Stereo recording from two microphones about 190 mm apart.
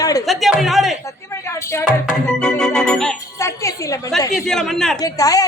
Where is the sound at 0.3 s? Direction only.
Centre (ahead or behind).